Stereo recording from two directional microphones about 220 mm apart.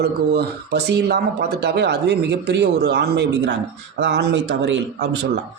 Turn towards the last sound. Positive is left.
turn(degrees=-55)  # may be behind; listen again after turning